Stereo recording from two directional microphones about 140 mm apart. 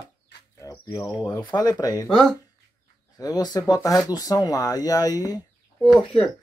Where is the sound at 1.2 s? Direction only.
15° left (ahead or behind).